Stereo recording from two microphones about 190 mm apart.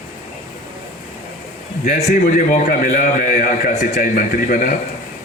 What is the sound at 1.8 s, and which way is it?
A man's voice, 45° left (ahead or behind).